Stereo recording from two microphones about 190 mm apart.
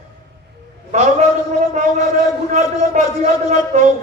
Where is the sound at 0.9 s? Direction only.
35° right (ahead or behind).